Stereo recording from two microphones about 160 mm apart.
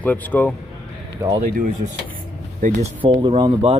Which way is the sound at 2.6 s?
55° right (ahead or behind).